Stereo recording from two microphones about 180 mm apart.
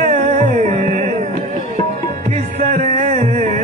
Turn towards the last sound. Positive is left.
turn(degrees=-40)  # may be behind; listen again after turning